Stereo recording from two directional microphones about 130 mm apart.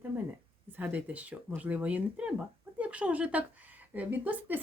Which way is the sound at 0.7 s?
15° right (ahead or behind).